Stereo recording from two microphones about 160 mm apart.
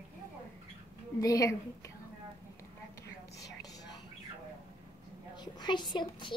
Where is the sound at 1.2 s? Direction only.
20° left (ahead or behind).